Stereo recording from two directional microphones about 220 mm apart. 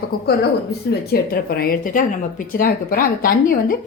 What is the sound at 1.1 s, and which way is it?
Speech, 45° left (ahead or behind).